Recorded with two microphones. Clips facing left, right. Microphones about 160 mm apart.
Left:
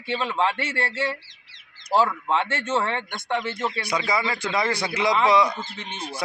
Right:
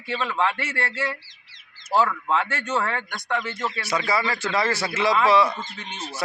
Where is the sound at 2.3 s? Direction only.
30° left (ahead or behind).